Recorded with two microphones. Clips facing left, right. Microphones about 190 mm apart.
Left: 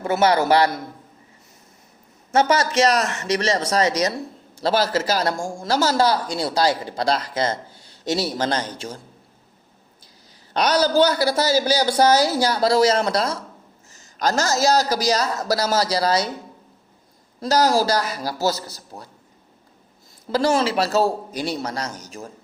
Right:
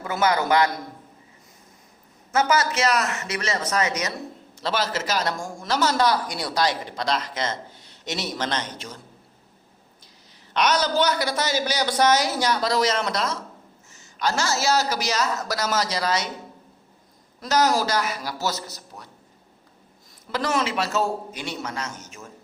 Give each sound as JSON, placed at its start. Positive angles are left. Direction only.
{"t": 0.0, "sound": "a man's voice", "side_deg": 30}
{"t": 2.3, "sound": "a man's voice", "side_deg": 30}
{"t": 10.5, "sound": "a man's voice", "side_deg": 35}
{"t": 17.4, "sound": "a man's voice", "side_deg": 35}
{"t": 20.3, "sound": "a man's voice", "side_deg": 30}